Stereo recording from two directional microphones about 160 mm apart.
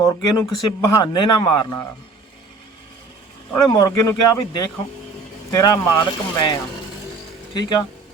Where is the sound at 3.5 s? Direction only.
20° left (ahead or behind).